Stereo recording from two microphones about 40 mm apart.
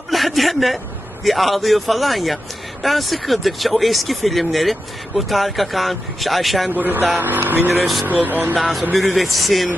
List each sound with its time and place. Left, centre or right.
0.1 s a sound: centre
1.2 s speech: centre
6.7 s speech: right
9.0 s speech: centre